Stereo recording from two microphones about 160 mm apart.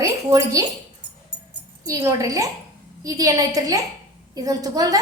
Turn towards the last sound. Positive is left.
turn(degrees=-20)  # may be behind; listen again after turning